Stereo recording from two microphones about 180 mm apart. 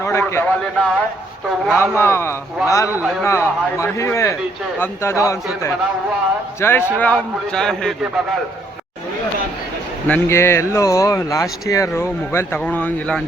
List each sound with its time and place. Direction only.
0.0 s a man's voice: 15° left (ahead or behind)
1.6 s speech: 10° right (ahead or behind)
1.9 s speech: 15° left (ahead or behind)
10.1 s speech: 15° left (ahead or behind)